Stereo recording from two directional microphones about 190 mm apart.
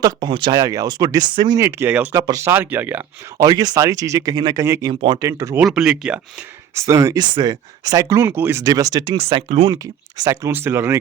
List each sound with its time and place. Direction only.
0.0 s speech: 25° right (ahead or behind)
4.9 s speech: 25° right (ahead or behind)
5.2 s speech: 15° right (ahead or behind)
6.7 s speech: 15° right (ahead or behind)
9.7 s speech: 20° right (ahead or behind)